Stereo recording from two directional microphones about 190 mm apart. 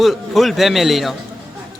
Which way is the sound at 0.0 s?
Centre (ahead or behind).